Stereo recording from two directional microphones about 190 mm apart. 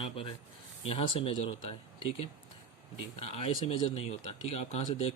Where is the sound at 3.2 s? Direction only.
30° left (ahead or behind).